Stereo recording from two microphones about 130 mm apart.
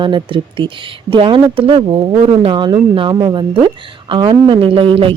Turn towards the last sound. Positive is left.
turn(degrees=-45)  # may be behind; listen again after turning